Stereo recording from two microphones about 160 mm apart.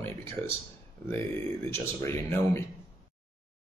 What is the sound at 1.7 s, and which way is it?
Speech, 15° left (ahead or behind).